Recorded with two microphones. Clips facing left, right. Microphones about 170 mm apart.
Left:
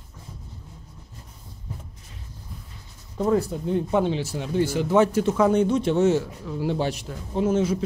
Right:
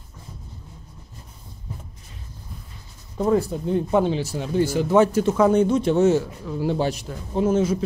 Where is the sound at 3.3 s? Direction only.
30° right (ahead or behind).